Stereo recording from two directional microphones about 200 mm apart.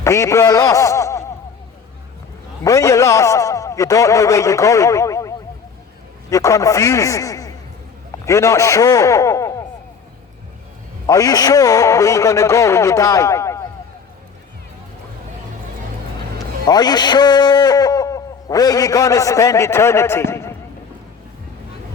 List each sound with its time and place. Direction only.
0.0 s a man's voice: 15° left (ahead or behind)
2.6 s a man's voice: 15° left (ahead or behind)
6.3 s a man's voice: 15° left (ahead or behind)
11.0 s a man's voice: 15° left (ahead or behind)
16.6 s a man's voice: 20° left (ahead or behind)